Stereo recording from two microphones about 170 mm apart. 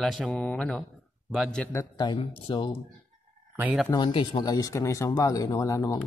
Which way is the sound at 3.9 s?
30° left (ahead or behind).